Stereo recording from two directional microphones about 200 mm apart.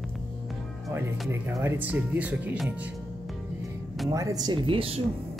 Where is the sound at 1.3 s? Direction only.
15° right (ahead or behind).